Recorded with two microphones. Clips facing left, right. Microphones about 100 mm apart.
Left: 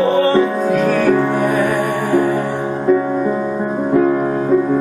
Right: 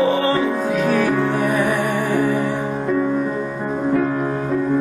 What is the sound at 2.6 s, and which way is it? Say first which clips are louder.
Music: left 4 dB; 20° left (ahead or behind).